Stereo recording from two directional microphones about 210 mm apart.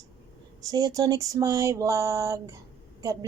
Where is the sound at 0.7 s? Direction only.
15° right (ahead or behind).